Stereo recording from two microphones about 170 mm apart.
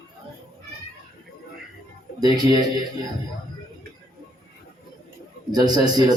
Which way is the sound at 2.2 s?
25° right (ahead or behind).